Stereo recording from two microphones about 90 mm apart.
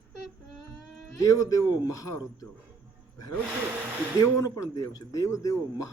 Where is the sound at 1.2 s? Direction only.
40° left (ahead or behind).